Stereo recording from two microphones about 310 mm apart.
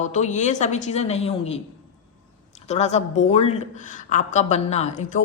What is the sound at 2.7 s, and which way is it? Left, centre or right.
Speech, left.